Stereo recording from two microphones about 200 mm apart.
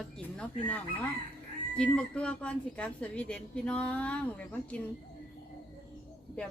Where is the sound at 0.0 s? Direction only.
5° left (ahead or behind).